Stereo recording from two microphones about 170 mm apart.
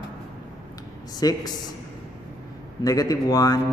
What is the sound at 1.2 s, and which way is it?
Speech, 20° left (ahead or behind).